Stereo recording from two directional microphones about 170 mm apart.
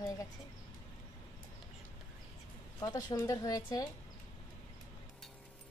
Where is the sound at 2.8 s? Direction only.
25° left (ahead or behind).